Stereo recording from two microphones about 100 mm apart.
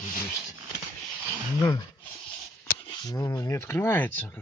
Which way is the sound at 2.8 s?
40° left (ahead or behind).